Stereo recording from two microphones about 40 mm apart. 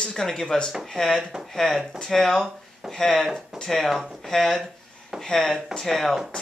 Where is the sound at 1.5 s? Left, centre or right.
Centre.